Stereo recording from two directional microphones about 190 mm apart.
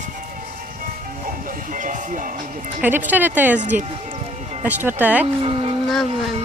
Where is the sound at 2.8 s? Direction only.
10° right (ahead or behind).